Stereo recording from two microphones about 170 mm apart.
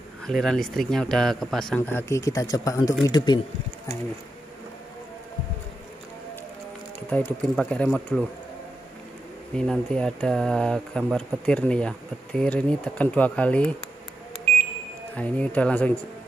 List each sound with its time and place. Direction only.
0.3 s speech: 5° left (ahead or behind); by 3.3 s 25° left (ahead or behind)
7.1 s speech: 5° left (ahead or behind)
9.6 s speech: 5° left (ahead or behind)
15.1 s speech: 10° left (ahead or behind)